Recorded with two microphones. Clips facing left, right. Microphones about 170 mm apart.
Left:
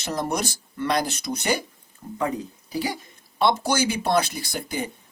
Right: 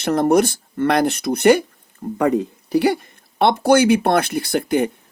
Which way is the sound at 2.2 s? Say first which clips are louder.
Right 9 dB; 70° right (ahead or behind).